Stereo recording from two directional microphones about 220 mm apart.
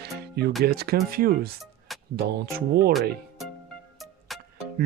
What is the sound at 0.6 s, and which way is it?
Speech, 45° right (ahead or behind).